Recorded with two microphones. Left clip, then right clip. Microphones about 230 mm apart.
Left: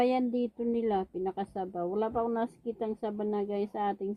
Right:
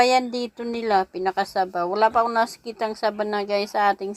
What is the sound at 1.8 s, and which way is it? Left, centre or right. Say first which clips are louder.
Speech: right 11 dB; right.